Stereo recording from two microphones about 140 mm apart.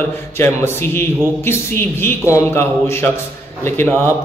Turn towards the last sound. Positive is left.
turn(degrees=15)  # may be behind; listen again after turning